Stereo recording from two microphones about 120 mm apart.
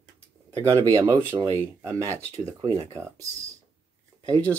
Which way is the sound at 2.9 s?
25° right (ahead or behind).